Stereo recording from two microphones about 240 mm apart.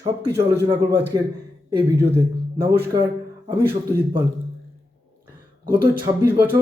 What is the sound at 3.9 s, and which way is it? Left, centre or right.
Speech, centre.